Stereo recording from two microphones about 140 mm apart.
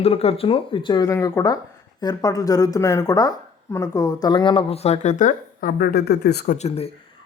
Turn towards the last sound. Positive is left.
turn(degrees=70)  # may be behind; listen again after turning